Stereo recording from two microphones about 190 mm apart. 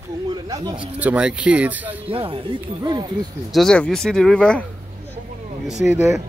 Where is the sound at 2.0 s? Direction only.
30° right (ahead or behind).